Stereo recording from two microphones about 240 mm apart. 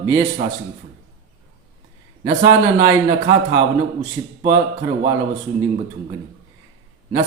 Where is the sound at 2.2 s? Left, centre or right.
Centre.